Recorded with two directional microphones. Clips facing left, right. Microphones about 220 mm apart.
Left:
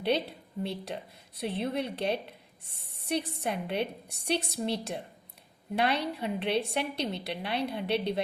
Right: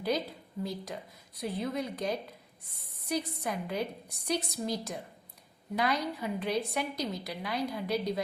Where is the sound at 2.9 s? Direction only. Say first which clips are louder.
Left 2 dB; 30° left (ahead or behind).